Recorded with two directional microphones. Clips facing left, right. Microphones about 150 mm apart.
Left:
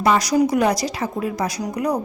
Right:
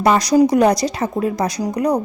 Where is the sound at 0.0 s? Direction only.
40° right (ahead or behind).